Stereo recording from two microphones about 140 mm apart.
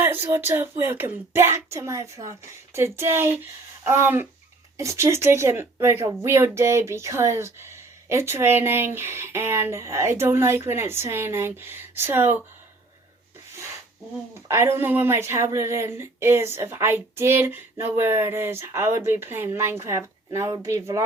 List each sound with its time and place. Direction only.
0.0 s speech: 15° right (ahead or behind)
14.4 s speech: 20° right (ahead or behind)